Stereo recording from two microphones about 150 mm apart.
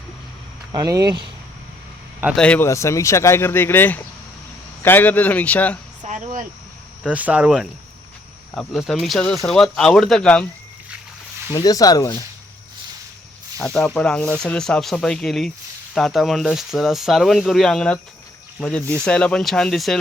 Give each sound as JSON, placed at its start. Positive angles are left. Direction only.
{"t": 0.7, "sound": "speech", "side_deg": -25}
{"t": 2.3, "sound": "speech", "side_deg": 5}
{"t": 2.6, "sound": "speech", "side_deg": 20}
{"t": 6.0, "sound": "cricket", "side_deg": -55}
{"t": 7.0, "sound": "speech", "side_deg": -10}
{"t": 11.5, "sound": "speech", "side_deg": 25}
{"t": 13.6, "sound": "speech", "side_deg": 10}